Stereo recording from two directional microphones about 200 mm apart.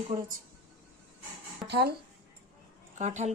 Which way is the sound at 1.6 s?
55° right (ahead or behind).